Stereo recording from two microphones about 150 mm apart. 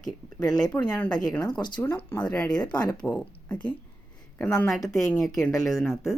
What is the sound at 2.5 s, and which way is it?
Speech, 30° left (ahead or behind).